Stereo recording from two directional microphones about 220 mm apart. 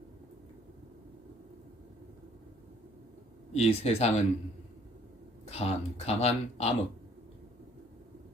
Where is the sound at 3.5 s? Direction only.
30° left (ahead or behind).